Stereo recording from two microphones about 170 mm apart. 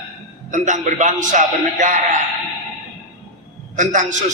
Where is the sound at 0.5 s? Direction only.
45° right (ahead or behind).